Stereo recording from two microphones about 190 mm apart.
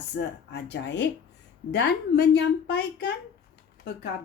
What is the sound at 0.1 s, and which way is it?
Speech, 70° left (ahead or behind).